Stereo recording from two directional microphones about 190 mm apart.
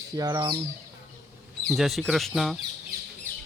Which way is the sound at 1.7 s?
Centre (ahead or behind).